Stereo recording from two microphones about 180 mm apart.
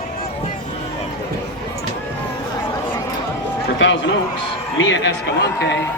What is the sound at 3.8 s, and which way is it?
Speech, 90° left.